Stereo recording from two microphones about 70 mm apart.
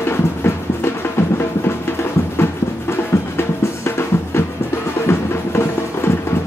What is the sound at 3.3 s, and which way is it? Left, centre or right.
Drum, left.